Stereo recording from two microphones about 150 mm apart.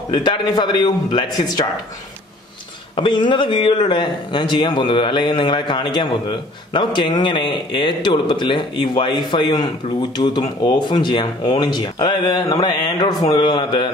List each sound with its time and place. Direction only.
0.1 s speech: 30° left (ahead or behind)
3.0 s speech: 30° left (ahead or behind)